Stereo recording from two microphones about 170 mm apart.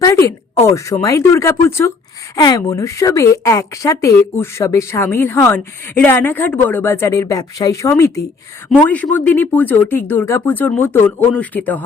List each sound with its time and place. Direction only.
0.0 s a woman's voice: 20° left (ahead or behind)